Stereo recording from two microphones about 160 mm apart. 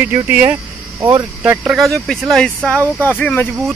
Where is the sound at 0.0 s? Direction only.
10° right (ahead or behind); by 3.7 s 10° left (ahead or behind).